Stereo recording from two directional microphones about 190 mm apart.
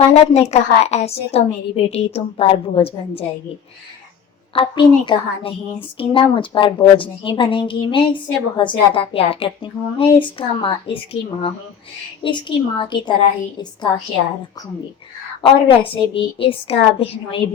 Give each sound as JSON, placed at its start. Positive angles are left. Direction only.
{"t": 0.1, "sound": "a woman's voice", "side_deg": 35}
{"t": 4.5, "sound": "a woman's voice", "side_deg": 25}
{"t": 15.4, "sound": "a woman's voice", "side_deg": 30}